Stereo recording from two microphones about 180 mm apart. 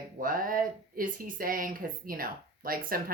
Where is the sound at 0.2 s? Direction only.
50° right (ahead or behind).